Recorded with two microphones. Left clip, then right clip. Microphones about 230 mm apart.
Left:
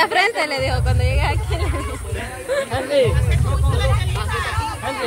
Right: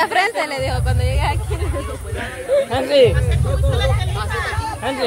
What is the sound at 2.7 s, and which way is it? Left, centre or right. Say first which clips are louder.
Speech: right 4 dB; right.